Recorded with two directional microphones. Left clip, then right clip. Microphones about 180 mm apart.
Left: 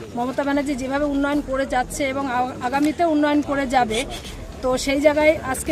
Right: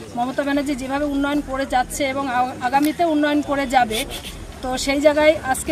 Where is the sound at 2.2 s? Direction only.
5° left (ahead or behind).